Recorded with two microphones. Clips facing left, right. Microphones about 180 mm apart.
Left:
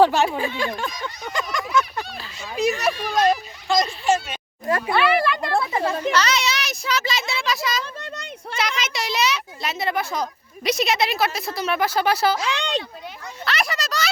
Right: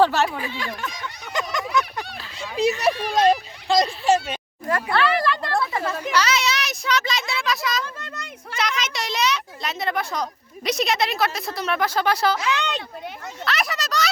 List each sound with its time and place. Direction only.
0.0 s speech: 15° left (ahead or behind)
0.3 s speech: 25° left (ahead or behind)
1.3 s a sound: 20° right (ahead or behind)
2.4 s a child's voice: 30° right (ahead or behind)
4.0 s a sound: 35° right (ahead or behind)
4.7 s a sound: 15° left (ahead or behind)
5.5 s a sound: 25° left (ahead or behind)
6.1 s speech: 10° right (ahead or behind)
7.9 s a child's voice: 30° left (ahead or behind)
8.5 s speech: 5° left (ahead or behind)
12.4 s a child's voice: 35° left (ahead or behind)
13.4 s speech: centre (ahead or behind)